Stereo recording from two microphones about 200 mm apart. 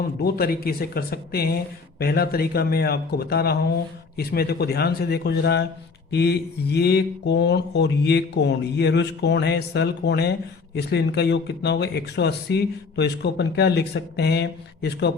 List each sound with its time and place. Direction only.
0.2 s speech: 50° left (ahead or behind)